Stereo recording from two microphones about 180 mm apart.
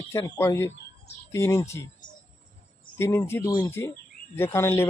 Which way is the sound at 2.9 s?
15° left (ahead or behind).